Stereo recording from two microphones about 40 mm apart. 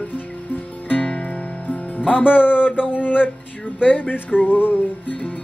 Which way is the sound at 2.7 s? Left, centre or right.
Right.